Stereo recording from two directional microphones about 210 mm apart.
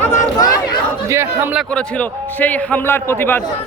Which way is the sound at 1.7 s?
5° left (ahead or behind).